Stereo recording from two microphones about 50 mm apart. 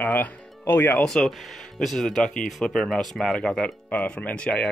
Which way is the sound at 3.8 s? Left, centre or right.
Left.